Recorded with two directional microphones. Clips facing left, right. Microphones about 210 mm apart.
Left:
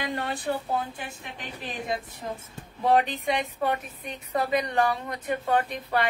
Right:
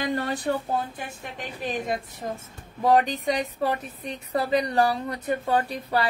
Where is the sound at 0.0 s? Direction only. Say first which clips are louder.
Right 4 dB; 40° right (ahead or behind).